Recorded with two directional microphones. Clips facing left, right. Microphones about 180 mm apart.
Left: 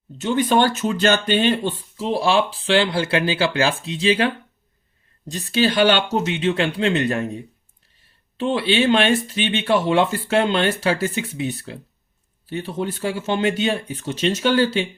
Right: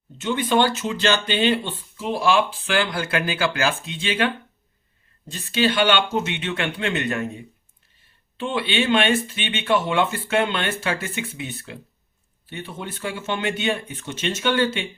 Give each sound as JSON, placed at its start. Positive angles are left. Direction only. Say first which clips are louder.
{"t": 0.2, "sound": "speech", "louder": "left 2 dB", "side_deg": 40}
{"t": 5.3, "sound": "speech", "louder": "left 2 dB", "side_deg": 40}
{"t": 8.4, "sound": "speech", "louder": "left 4 dB", "side_deg": 40}